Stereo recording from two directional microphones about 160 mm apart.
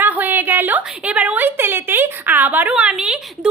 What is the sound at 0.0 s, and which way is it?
A woman's voice, 10° right (ahead or behind).